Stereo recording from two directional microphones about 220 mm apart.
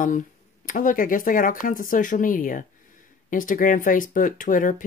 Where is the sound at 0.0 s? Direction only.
35° left (ahead or behind).